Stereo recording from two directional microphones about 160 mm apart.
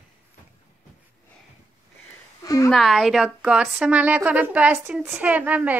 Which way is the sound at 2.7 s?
Centre (ahead or behind).